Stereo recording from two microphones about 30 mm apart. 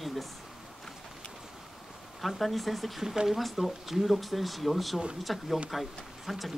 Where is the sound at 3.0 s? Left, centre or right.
Centre.